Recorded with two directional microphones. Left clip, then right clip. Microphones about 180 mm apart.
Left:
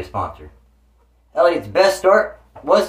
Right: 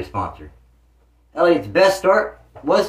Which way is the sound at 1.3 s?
10° left (ahead or behind).